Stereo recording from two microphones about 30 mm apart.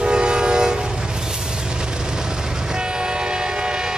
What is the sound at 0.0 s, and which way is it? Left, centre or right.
Train, right.